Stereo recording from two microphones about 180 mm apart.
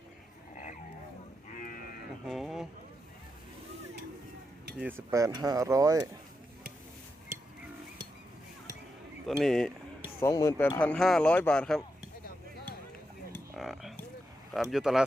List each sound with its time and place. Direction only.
0.5 s a sound: 45° left (ahead or behind)
1.5 s livestock: 50° left (ahead or behind)
2.2 s speech: centre (ahead or behind)
4.8 s speech: 10° right (ahead or behind)
9.4 s speech: centre (ahead or behind)
10.2 s speech: 15° left (ahead or behind)
13.6 s a sound: centre (ahead or behind)
14.5 s speech: centre (ahead or behind)